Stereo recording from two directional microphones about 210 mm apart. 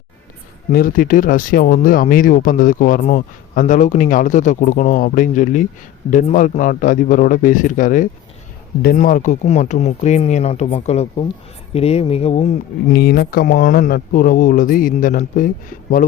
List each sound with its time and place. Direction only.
0.7 s speech: 45° left (ahead or behind)
12.9 s speech: 50° left (ahead or behind)